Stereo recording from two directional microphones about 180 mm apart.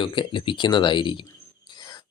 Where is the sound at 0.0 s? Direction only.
25° left (ahead or behind).